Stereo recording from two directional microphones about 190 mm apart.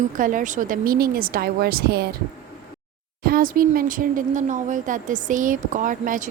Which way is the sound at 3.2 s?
50° right (ahead or behind).